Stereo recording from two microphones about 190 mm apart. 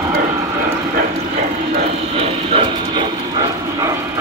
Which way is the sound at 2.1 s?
30° right (ahead or behind).